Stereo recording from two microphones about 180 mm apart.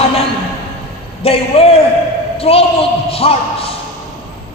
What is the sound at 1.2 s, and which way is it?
A man's voice, 35° left (ahead or behind).